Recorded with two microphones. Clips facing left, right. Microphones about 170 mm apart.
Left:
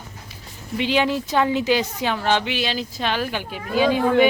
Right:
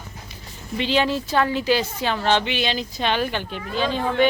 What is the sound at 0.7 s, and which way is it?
Speech, 10° left (ahead or behind).